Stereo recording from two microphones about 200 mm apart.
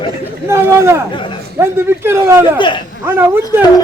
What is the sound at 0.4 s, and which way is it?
Speech, 15° right (ahead or behind).